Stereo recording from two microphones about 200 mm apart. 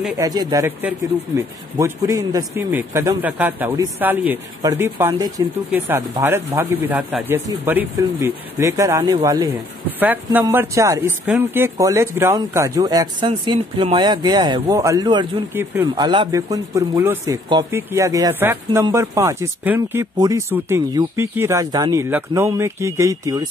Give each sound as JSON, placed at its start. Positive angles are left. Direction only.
{"t": 0.2, "sound": "speech", "side_deg": -20}
{"t": 9.9, "sound": "speech", "side_deg": -10}
{"t": 15.9, "sound": "speech", "side_deg": -25}